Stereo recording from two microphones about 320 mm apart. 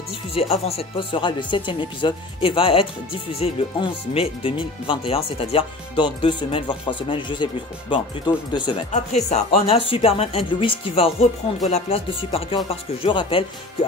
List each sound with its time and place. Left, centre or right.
0.3 s speech: centre
8.5 s speech: centre